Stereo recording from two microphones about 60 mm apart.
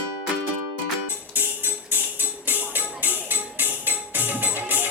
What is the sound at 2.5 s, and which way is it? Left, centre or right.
Music, right.